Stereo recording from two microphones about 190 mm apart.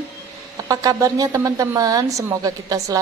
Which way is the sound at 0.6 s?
20° right (ahead or behind).